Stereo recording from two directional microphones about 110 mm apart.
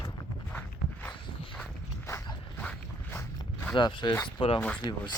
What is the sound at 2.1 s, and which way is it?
Zipper, 30° left (ahead or behind).